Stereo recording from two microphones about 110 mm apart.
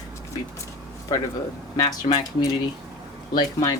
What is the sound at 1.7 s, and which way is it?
A woman's voice, 35° left (ahead or behind).